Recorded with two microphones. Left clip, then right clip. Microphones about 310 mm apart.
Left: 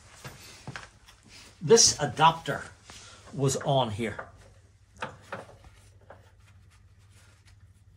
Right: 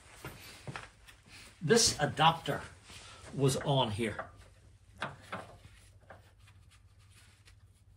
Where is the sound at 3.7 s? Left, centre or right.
Centre.